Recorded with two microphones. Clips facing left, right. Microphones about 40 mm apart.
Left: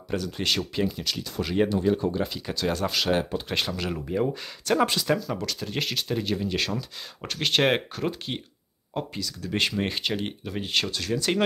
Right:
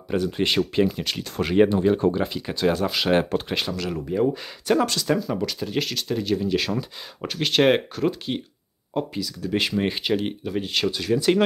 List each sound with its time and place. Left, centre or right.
0.1 s speech: right
0.8 s speech: right; by 2.8 s centre
2.8 s speech: centre
3.3 s speech: right
3.7 s speech: centre
5.3 s speech: centre
10.9 s speech: centre